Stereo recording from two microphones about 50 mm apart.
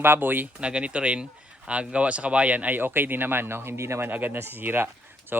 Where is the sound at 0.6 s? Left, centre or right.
Right.